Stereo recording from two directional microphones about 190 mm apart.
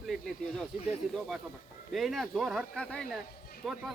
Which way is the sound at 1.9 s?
Centre (ahead or behind).